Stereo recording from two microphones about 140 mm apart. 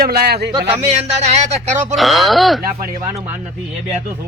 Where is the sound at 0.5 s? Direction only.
30° right (ahead or behind).